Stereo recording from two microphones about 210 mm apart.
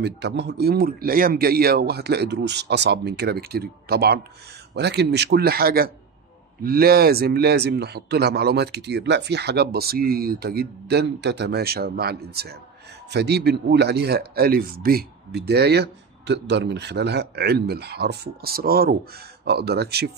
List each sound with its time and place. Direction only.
0.0 s speech: 55° right (ahead or behind)